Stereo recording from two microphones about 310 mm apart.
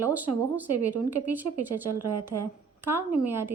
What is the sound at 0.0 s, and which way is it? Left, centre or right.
Speech, centre.